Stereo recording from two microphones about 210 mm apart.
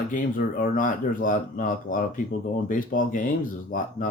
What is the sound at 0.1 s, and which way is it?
Speech, 40° left (ahead or behind).